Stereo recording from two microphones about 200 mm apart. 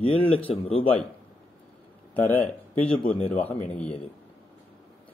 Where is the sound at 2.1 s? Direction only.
10° left (ahead or behind).